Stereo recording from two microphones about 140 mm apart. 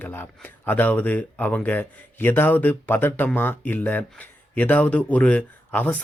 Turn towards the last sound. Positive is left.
turn(degrees=10)  # may be behind; listen again after turning